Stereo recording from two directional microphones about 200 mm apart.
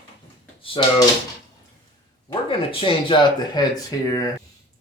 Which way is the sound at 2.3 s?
25° left (ahead or behind).